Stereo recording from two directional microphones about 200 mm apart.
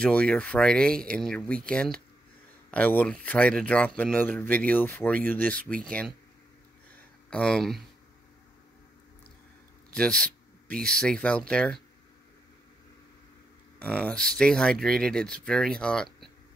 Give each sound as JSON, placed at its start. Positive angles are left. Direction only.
{"t": 0.0, "sound": "speech", "side_deg": 5}
{"t": 7.2, "sound": "speech", "side_deg": 5}
{"t": 9.9, "sound": "speech", "side_deg": 5}
{"t": 13.7, "sound": "speech", "side_deg": 5}